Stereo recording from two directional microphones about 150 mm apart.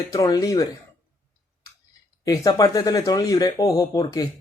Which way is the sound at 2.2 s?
25° left (ahead or behind).